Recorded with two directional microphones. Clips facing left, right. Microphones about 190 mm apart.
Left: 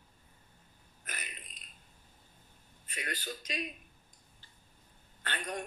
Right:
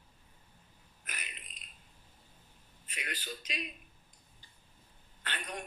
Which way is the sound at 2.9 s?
45° left (ahead or behind).